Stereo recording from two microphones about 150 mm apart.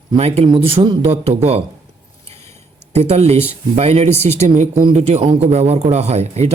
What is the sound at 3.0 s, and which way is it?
Speech, 45° right (ahead or behind).